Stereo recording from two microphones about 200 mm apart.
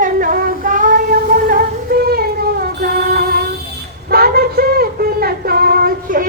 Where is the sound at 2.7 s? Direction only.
50° right (ahead or behind).